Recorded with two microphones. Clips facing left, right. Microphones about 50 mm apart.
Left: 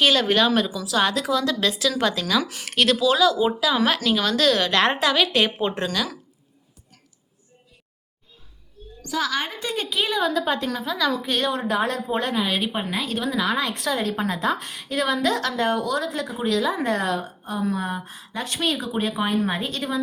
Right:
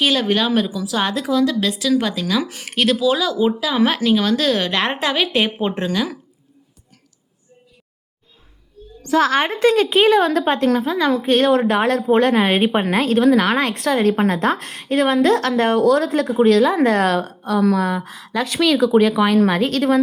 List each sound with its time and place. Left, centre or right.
0.0 s a woman's voice: centre
9.0 s a woman's voice: right
9.6 s a woman's voice: right
9.9 s a woman's voice: right
10.9 s a woman's voice: right
13.7 s a woman's voice: right